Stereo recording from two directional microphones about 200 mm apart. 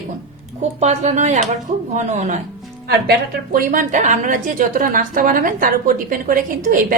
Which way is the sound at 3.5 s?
40° right (ahead or behind).